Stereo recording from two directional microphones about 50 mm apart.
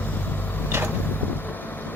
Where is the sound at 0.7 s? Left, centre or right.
Right.